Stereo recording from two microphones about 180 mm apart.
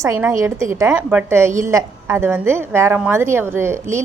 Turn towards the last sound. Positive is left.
turn(degrees=-15)  # may be behind; listen again after turning